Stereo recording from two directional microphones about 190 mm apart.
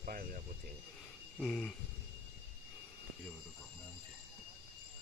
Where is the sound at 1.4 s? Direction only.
Centre (ahead or behind).